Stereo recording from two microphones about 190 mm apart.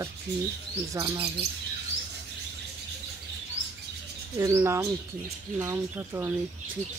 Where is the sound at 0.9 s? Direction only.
20° right (ahead or behind).